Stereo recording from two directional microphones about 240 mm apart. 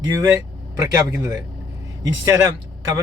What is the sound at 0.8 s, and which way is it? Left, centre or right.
Speech, centre.